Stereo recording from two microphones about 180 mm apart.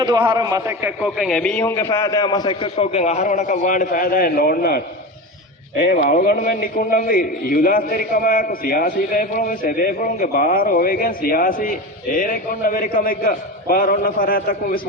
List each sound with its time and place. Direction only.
0.0 s a man's voice: 25° right (ahead or behind); by 14.8 s 55° left (ahead or behind)